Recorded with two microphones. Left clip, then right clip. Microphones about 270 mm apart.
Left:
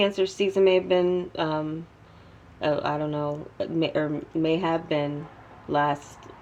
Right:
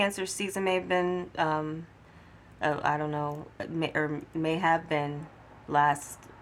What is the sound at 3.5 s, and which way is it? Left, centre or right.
Speech, right.